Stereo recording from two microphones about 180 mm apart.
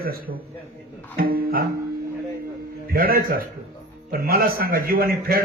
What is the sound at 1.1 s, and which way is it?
Music, 55° right (ahead or behind).